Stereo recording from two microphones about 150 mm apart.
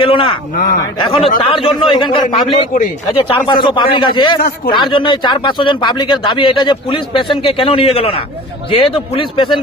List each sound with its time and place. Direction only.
0.0 s a man's voice: 35° left (ahead or behind)